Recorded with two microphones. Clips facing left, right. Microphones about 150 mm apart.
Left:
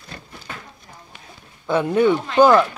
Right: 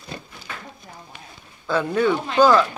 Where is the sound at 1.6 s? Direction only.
20° left (ahead or behind).